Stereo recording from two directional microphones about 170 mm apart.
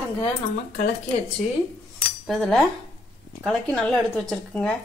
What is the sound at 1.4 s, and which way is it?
Speech, 40° left (ahead or behind).